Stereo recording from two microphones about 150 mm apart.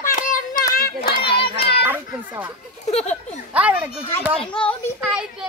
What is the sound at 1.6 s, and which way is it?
Children playing, 90° left.